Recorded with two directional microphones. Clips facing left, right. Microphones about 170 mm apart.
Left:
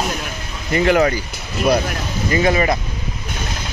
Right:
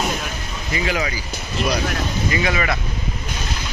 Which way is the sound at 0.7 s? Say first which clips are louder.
Left 9 dB; 55° left (ahead or behind).